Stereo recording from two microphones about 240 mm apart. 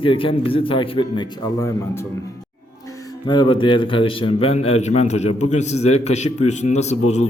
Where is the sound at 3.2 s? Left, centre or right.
Centre.